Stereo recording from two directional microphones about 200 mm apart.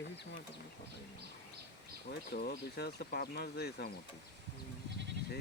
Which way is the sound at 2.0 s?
50° left (ahead or behind).